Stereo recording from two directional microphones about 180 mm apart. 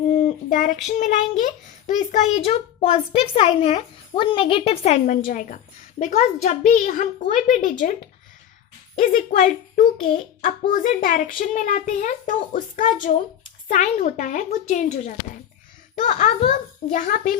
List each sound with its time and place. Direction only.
0.1 s a child's voice: 40° left (ahead or behind)
9.0 s a child's voice: 45° left (ahead or behind)